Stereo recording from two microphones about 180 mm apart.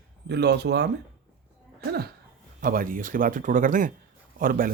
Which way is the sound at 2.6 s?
50° right (ahead or behind).